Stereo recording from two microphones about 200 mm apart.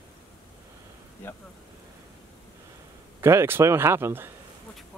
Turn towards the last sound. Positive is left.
turn(degrees=-10)  # may be behind; listen again after turning